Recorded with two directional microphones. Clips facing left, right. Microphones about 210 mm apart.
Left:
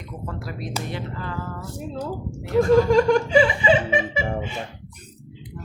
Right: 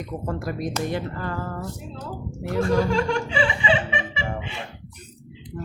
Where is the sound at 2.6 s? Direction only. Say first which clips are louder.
Left 6 dB; 40° left (ahead or behind).